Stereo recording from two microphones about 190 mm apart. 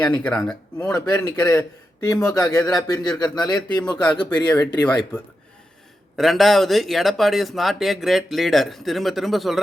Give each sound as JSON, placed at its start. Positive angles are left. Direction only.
{"t": 0.2, "sound": "speech", "side_deg": 5}
{"t": 0.9, "sound": "speech", "side_deg": 20}
{"t": 4.0, "sound": "speech", "side_deg": 10}
{"t": 6.1, "sound": "speech", "side_deg": 0}